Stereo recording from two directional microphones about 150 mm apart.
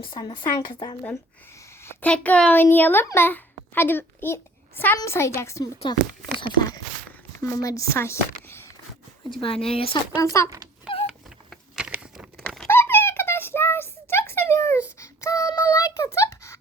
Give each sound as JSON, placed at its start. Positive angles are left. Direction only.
{"t": 0.0, "sound": "a woman's voice", "side_deg": 35}
{"t": 1.8, "sound": "a child's voice", "side_deg": 15}
{"t": 6.4, "sound": "a sound", "side_deg": 25}
{"t": 7.4, "sound": "speech", "side_deg": 20}
{"t": 9.3, "sound": "speech", "side_deg": 40}
{"t": 10.3, "sound": "a woman's voice", "side_deg": 20}
{"t": 11.8, "sound": "patter", "side_deg": -5}
{"t": 12.4, "sound": "a sound", "side_deg": 5}
{"t": 12.6, "sound": "a sound", "side_deg": 15}